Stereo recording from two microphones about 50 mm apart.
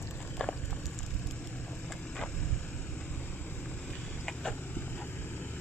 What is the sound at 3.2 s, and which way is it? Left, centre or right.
Vehicle, left.